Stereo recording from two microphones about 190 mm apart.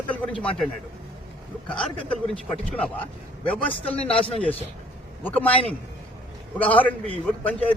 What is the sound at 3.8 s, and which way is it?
Speech, 30° left (ahead or behind).